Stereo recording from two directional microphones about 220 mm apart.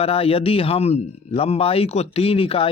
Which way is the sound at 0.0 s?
25° left (ahead or behind).